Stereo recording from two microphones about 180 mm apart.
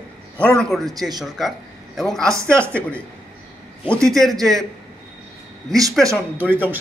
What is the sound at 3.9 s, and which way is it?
Speech, centre (ahead or behind).